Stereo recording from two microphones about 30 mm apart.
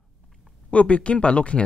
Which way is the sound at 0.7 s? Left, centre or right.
Left.